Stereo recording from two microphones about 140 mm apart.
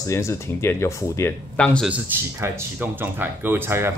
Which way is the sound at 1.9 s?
15° right (ahead or behind).